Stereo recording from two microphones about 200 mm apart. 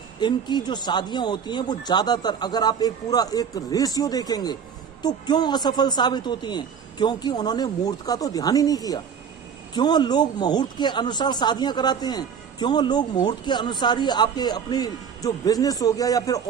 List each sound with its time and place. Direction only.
0.2 s speech: 20° left (ahead or behind)